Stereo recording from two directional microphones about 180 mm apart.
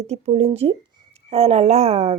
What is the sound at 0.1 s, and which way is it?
Speech, 30° right (ahead or behind).